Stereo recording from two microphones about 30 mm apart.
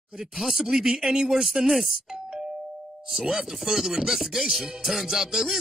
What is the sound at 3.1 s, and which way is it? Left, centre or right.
Speech, centre.